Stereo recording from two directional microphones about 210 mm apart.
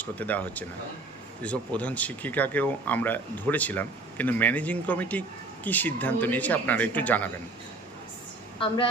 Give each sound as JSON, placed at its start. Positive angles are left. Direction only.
{"t": 0.0, "sound": "speech", "side_deg": 5}
{"t": 8.5, "sound": "a woman's voice", "side_deg": 25}